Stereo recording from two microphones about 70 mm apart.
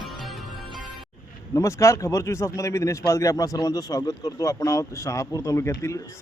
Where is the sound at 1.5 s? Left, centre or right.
Left.